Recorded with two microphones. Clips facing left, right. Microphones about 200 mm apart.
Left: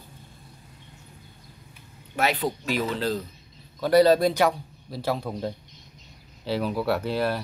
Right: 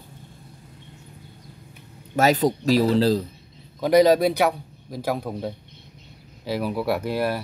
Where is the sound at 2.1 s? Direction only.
40° right (ahead or behind).